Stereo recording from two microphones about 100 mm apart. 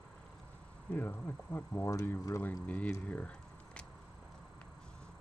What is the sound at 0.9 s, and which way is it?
Speech, 20° left (ahead or behind).